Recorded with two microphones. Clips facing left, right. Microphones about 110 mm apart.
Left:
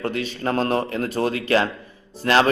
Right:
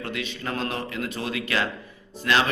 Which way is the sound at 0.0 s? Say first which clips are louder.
Left 7 dB; 40° left (ahead or behind).